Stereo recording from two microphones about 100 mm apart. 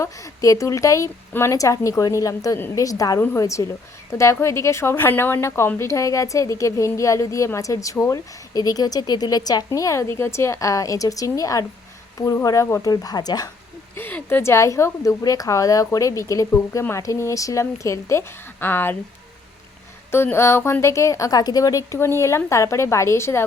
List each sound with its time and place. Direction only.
0.0 s speech: 35° left (ahead or behind)
8.5 s speech: 40° left (ahead or behind)
13.9 s speech: 20° left (ahead or behind)
20.1 s speech: 25° left (ahead or behind)